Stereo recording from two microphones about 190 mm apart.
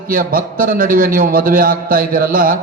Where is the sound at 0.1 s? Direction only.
50° right (ahead or behind).